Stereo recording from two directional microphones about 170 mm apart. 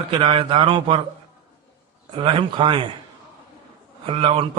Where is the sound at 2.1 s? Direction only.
30° right (ahead or behind).